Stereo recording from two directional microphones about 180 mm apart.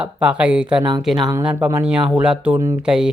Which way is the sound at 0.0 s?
5° right (ahead or behind).